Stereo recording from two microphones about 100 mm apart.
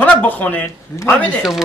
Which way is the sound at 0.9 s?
35° left (ahead or behind).